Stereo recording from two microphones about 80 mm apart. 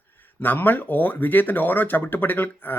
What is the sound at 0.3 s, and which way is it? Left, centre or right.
Speech, left.